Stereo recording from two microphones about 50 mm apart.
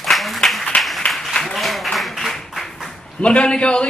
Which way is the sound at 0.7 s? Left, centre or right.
Left.